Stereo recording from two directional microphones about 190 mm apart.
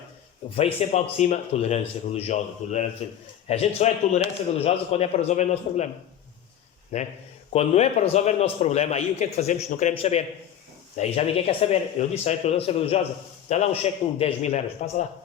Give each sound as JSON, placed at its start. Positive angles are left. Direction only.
{"t": 0.5, "sound": "a man's voice", "side_deg": 35}
{"t": 6.9, "sound": "a man's voice", "side_deg": 35}